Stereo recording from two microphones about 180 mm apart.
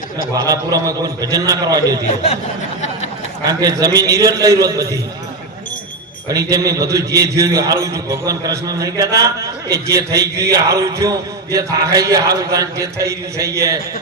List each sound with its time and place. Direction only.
0.4 s a man's voice: 20° right (ahead or behind)
3.4 s a man's voice: 20° right (ahead or behind)
6.2 s a man's voice: 20° right (ahead or behind)